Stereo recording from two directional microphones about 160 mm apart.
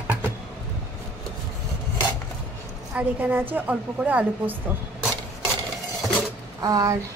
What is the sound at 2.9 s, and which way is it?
Speech, 10° right (ahead or behind).